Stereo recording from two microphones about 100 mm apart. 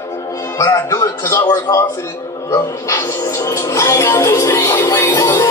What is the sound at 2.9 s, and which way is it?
A man's voice, 30° left (ahead or behind).